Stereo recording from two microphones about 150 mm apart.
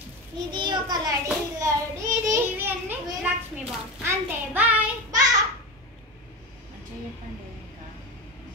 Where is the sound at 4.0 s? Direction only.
10° right (ahead or behind).